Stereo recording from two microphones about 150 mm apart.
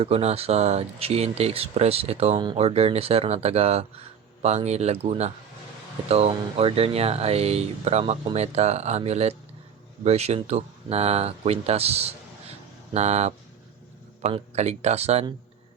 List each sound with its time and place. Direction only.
0.0 s speech: 45° right (ahead or behind)